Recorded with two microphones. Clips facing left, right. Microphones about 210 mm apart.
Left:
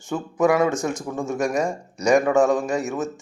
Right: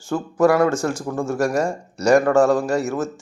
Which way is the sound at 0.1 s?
5° left (ahead or behind).